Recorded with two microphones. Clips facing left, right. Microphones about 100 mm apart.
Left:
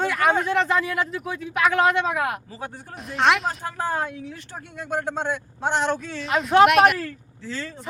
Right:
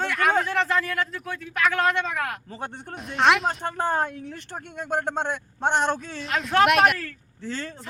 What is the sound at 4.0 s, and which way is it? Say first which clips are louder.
A man's voice: right 1 dB; 50° right (ahead or behind).